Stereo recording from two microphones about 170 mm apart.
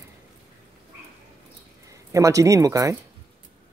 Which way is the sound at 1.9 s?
20° right (ahead or behind).